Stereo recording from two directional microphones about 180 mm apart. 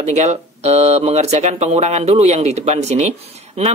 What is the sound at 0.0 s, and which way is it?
Speech, 40° right (ahead or behind).